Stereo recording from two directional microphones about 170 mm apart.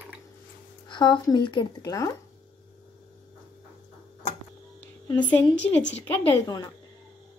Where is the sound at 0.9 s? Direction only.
25° left (ahead or behind).